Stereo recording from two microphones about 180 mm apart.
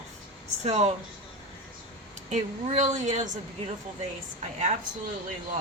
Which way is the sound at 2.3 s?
40° right (ahead or behind).